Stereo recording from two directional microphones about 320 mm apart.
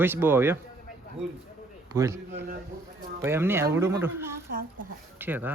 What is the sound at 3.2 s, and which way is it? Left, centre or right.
Speech, centre.